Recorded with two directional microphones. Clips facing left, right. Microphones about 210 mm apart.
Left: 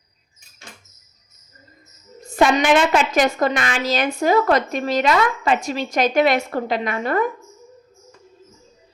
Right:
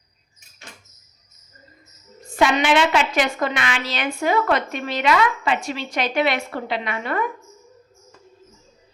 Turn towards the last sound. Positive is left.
turn(degrees=40)  # may be behind; listen again after turning